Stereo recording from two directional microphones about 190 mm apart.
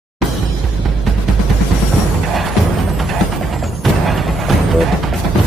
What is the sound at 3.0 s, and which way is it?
Music, centre (ahead or behind).